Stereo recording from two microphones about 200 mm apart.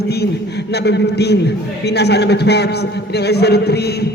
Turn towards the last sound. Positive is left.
turn(degrees=55)  # may be behind; listen again after turning